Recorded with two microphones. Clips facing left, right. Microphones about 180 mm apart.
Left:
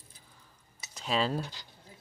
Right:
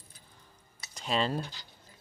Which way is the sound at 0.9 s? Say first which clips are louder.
Even; centre (ahead or behind).